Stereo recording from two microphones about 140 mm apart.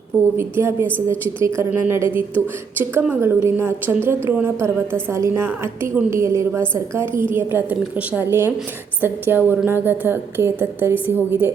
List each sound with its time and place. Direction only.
0.3 s a woman's voice: 15° right (ahead or behind)